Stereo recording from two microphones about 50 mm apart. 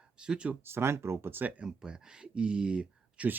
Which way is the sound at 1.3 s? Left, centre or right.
Right.